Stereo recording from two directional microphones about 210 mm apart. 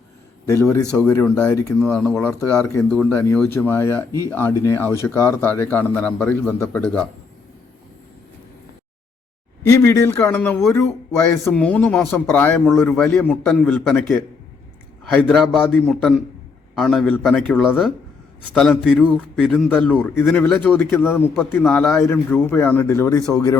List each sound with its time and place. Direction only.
0.4 s speech: 10° left (ahead or behind)
9.6 s speech: 15° left (ahead or behind)
15.1 s a man's voice: 5° left (ahead or behind)